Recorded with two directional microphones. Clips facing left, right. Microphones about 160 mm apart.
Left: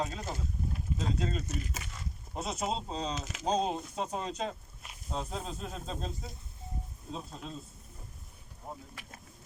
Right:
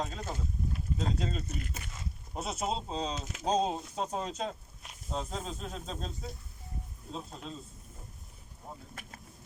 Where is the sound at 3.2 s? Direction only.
90° left.